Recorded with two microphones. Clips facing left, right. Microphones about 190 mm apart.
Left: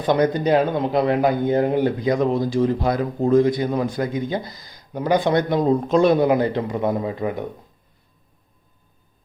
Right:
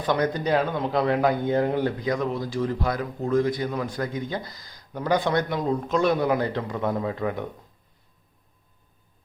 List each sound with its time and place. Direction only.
0.0 s speech: 20° left (ahead or behind)